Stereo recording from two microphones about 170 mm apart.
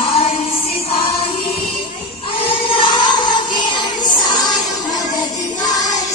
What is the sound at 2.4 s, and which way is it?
Music, 30° left (ahead or behind).